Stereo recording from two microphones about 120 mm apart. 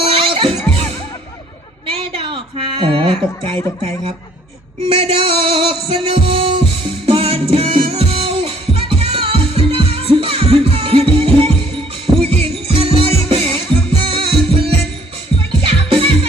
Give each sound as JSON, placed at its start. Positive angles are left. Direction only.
{"t": 0.0, "sound": "music", "side_deg": -50}
{"t": 2.0, "sound": "a sound", "side_deg": -45}
{"t": 4.9, "sound": "music", "side_deg": -45}
{"t": 15.4, "sound": "music", "side_deg": -50}